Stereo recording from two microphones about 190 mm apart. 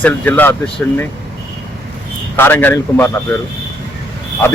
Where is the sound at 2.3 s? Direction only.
10° left (ahead or behind).